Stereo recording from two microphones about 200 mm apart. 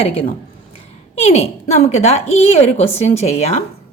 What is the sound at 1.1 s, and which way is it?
A woman's voice, 30° left (ahead or behind).